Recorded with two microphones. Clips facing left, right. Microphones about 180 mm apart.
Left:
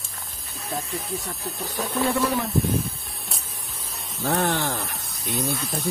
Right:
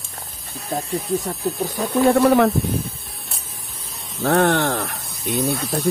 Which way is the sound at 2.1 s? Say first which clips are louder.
Right 10 dB; 65° right (ahead or behind).